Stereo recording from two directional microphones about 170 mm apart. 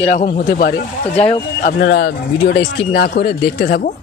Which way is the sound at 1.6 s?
65° left (ahead or behind).